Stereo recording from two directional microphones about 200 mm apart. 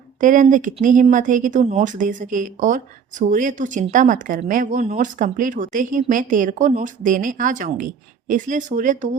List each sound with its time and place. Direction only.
0.2 s speech: 40° right (ahead or behind)